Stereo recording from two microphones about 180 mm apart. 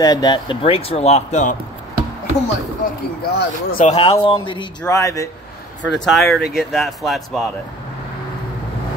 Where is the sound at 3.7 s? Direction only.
35° left (ahead or behind).